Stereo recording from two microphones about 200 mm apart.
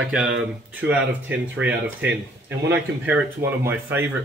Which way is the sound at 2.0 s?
60° right (ahead or behind).